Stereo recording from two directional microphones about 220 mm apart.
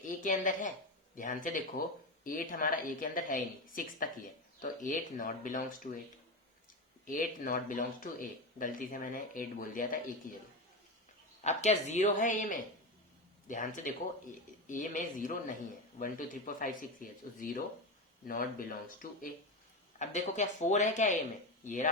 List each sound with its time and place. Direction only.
0.0 s a woman's voice: 35° left (ahead or behind)
7.1 s speech: 40° left (ahead or behind)
11.4 s speech: 30° left (ahead or behind)
20.0 s speech: 30° left (ahead or behind)